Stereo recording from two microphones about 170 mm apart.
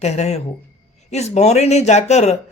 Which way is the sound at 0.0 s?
40° left (ahead or behind).